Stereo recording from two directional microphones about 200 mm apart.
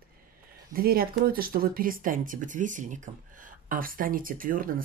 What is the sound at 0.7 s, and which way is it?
Speech, 50° right (ahead or behind).